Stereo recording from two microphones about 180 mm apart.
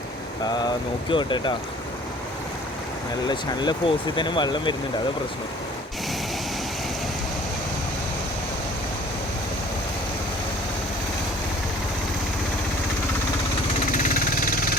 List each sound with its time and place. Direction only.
0.4 s speech: 25° left (ahead or behind)
3.2 s speech: 25° left (ahead or behind)
13.9 s engine: 45° left (ahead or behind)